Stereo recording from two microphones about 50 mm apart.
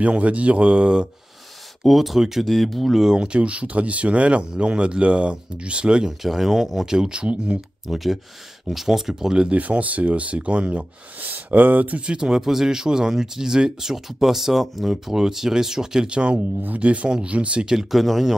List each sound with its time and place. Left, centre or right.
0.0 s speech: right
1.8 s speech: centre
3.2 s speech: right
6.2 s speech: centre
7.9 s speech: centre
9.6 s speech: right
12.1 s speech: centre
16.2 s speech: right
17.6 s speech: centre